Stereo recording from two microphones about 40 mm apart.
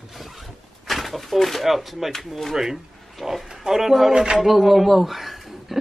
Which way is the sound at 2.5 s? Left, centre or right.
Centre.